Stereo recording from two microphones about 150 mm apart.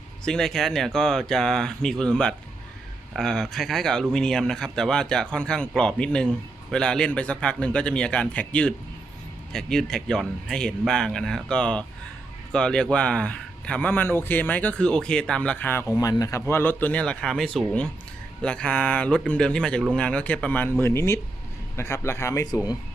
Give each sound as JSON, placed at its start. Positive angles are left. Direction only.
{"t": 0.3, "sound": "a man's voice", "side_deg": 5}